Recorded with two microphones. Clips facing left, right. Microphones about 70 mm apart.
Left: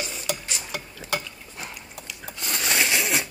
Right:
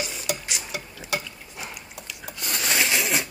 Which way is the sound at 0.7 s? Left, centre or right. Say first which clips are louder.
Left 1 dB; left.